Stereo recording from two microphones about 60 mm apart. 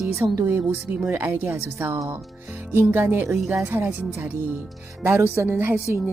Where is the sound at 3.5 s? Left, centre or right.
Right.